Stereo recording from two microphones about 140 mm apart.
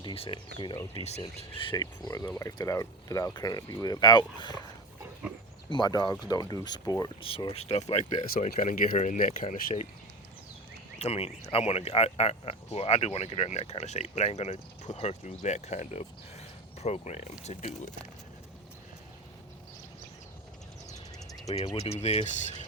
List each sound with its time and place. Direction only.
0.0 s speech: 40° left (ahead or behind)
0.9 s speech: 50° left (ahead or behind)
1.4 s speech: 40° left (ahead or behind)
5.7 s speech: 30° left (ahead or behind)
7.2 s speech: 40° left (ahead or behind)
8.3 s speech: 65° left (ahead or behind)
10.9 s speech: 50° left (ahead or behind)
21.6 s speech: 50° left (ahead or behind)